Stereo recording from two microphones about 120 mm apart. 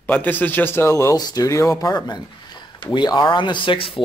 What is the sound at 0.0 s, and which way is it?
A man's voice, 15° left (ahead or behind).